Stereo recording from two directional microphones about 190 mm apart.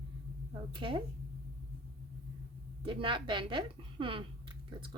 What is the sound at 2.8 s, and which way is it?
A woman's voice, 25° right (ahead or behind).